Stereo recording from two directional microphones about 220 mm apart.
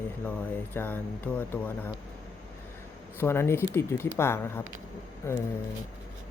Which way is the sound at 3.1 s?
10° left (ahead or behind).